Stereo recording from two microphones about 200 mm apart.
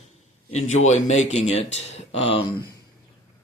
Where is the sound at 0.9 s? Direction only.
35° left (ahead or behind).